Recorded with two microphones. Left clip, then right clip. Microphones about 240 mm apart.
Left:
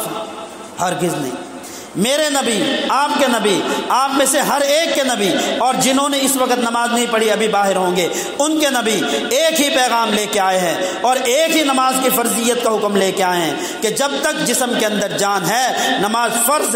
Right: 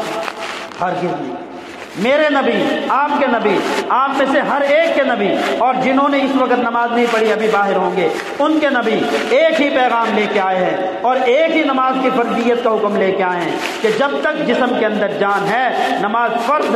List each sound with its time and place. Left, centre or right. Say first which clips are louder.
2.0 s a man's voice: right 3 dB; left
8.4 s a man's voice: right 1 dB; left